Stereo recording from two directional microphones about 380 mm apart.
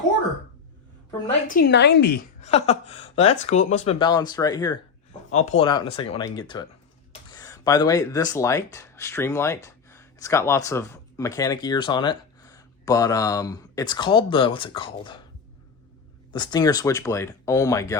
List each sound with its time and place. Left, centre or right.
1.5 s a woman's voice: left
16.3 s speech: centre